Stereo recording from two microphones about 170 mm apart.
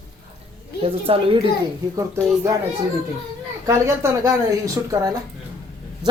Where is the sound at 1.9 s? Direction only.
20° right (ahead or behind).